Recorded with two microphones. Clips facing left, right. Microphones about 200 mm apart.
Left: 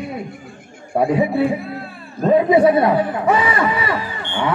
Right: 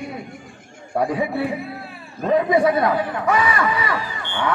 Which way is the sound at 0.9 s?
25° left (ahead or behind).